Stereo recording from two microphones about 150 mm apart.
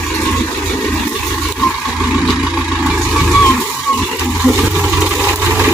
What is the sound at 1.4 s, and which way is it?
Vehicle, 5° left (ahead or behind).